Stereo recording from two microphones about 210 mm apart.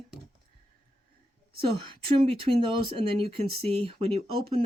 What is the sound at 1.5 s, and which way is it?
Speech, 25° right (ahead or behind).